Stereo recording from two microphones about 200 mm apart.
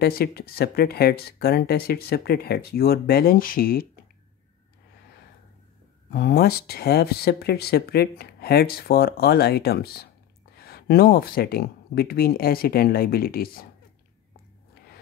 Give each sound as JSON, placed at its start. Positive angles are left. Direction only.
{"t": 0.0, "sound": "speech", "side_deg": 50}
{"t": 6.0, "sound": "speech", "side_deg": 55}